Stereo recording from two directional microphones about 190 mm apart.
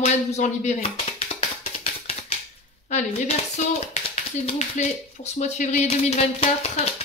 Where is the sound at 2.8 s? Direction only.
35° left (ahead or behind).